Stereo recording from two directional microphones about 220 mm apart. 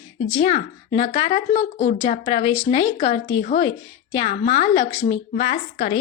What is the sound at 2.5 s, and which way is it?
Speech, 15° left (ahead or behind).